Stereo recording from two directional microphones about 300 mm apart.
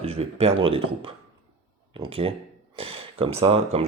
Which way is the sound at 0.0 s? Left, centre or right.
Centre.